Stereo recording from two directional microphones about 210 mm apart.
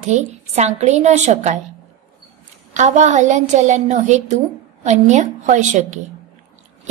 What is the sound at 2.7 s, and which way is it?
Speech, 35° right (ahead or behind).